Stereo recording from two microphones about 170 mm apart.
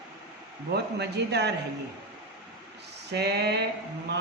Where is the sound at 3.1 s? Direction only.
75° right (ahead or behind).